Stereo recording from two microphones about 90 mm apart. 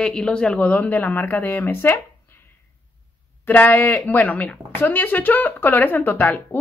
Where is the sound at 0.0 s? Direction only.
10° left (ahead or behind); by 2.0 s 25° left (ahead or behind).